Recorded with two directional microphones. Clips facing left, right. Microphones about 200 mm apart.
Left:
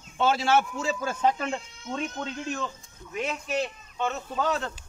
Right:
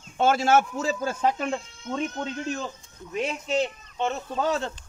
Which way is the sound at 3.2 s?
25° right (ahead or behind).